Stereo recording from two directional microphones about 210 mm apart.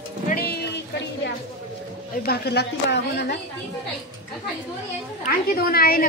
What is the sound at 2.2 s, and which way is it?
A woman's voice, 50° left (ahead or behind).